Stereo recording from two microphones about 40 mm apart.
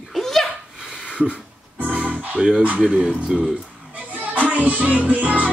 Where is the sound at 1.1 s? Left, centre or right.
Right.